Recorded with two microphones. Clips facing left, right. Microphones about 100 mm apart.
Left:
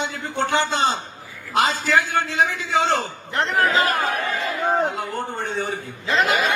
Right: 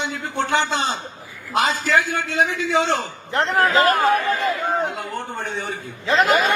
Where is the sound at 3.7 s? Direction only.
45° right (ahead or behind).